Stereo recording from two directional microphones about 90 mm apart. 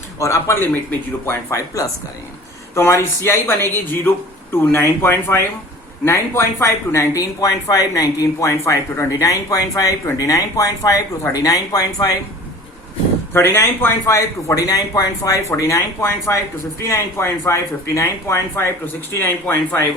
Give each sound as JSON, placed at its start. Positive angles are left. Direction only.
{"t": 0.2, "sound": "speech", "side_deg": 35}
{"t": 4.5, "sound": "speech", "side_deg": 25}
{"t": 13.3, "sound": "speech", "side_deg": 25}